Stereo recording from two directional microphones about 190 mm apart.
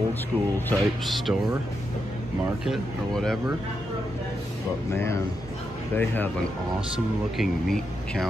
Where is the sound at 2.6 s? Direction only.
Centre (ahead or behind).